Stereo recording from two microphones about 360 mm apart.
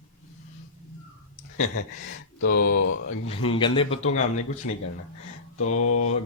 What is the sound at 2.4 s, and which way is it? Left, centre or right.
Speech, left.